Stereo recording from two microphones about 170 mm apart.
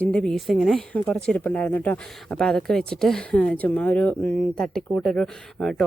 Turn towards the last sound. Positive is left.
turn(degrees=5)  # may be behind; listen again after turning